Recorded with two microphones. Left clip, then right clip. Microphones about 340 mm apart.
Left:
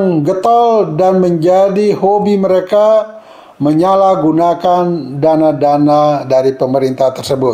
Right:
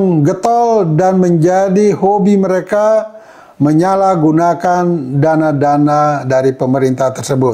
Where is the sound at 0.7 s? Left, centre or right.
Right.